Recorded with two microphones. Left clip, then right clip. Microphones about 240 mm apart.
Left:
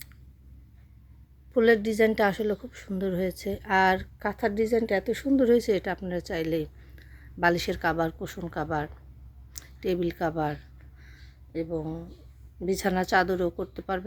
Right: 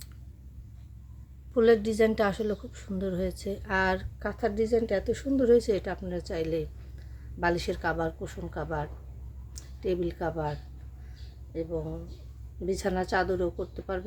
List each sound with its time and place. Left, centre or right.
1.5 s a woman's voice: left